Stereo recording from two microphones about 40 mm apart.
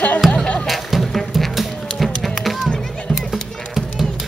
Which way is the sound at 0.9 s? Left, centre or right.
Centre.